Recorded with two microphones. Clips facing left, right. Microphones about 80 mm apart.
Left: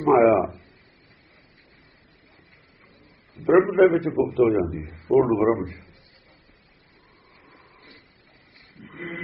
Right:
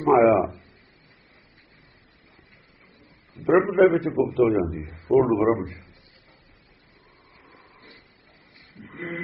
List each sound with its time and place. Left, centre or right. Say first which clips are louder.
0.0 s a man's voice: even; centre
3.4 s a man's voice: left 1 dB; centre
4.8 s a man's voice: even; right
5.0 s a man's voice: even; centre
7.4 s a sound: right 1 dB; right